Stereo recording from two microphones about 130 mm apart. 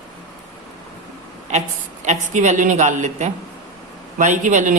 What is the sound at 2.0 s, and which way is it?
A woman's voice, 65° right (ahead or behind).